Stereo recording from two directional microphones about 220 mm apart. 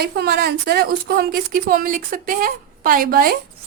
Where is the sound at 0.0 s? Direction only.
45° right (ahead or behind).